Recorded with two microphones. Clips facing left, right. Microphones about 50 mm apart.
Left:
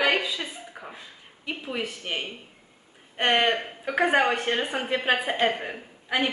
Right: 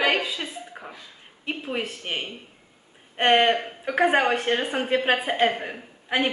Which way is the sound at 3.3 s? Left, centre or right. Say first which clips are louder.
Right 4 dB; centre.